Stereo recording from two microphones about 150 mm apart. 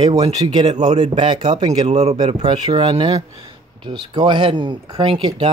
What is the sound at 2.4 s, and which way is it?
Speech, 25° right (ahead or behind).